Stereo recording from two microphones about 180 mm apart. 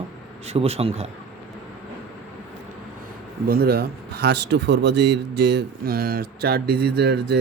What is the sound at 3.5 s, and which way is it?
Speech, 60° right (ahead or behind).